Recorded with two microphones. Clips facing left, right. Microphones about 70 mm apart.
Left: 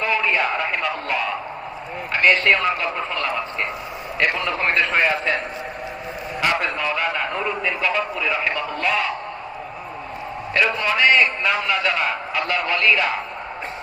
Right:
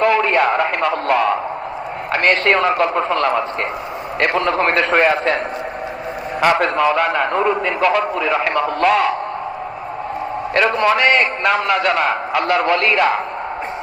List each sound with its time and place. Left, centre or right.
0.0 s speech: right
0.9 s a man's voice: right
4.6 s a man's voice: right
6.5 s a man's voice: right
10.8 s a man's voice: right